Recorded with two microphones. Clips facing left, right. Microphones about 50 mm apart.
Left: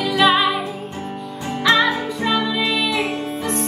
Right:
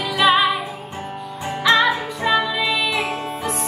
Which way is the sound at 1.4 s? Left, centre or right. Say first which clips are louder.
Even; centre.